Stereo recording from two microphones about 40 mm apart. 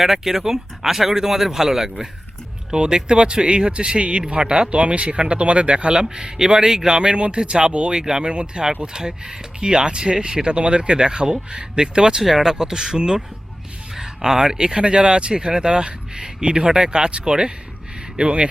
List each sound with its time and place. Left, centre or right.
0.0 s speech: centre; by 18.4 s right